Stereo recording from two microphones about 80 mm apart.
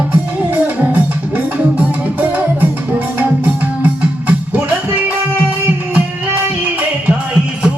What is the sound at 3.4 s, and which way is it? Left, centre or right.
Music, centre.